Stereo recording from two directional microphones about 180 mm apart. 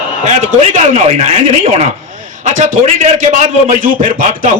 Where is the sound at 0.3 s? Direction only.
40° right (ahead or behind).